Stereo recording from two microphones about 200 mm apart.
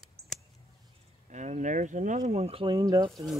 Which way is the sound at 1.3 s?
35° right (ahead or behind).